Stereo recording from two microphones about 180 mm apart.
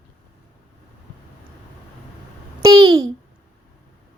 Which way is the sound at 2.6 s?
20° right (ahead or behind).